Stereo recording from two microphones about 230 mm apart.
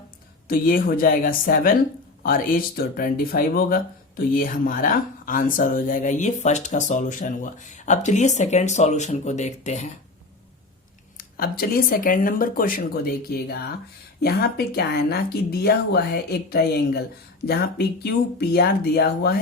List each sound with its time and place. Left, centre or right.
0.4 s speech: left
11.2 s speech: left